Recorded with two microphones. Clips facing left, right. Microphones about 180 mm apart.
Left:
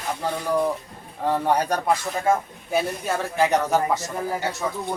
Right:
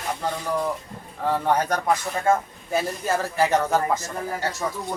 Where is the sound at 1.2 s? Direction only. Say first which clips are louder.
Left 1 dB; 10° left (ahead or behind).